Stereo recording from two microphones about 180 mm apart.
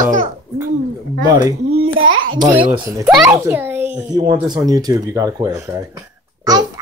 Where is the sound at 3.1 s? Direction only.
5° right (ahead or behind).